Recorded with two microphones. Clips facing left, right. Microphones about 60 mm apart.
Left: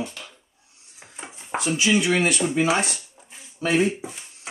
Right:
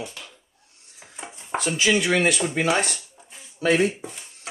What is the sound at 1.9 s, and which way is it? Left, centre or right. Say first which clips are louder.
Speech: even; centre.